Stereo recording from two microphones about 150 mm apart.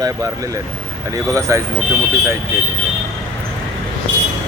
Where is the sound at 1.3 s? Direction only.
20° right (ahead or behind).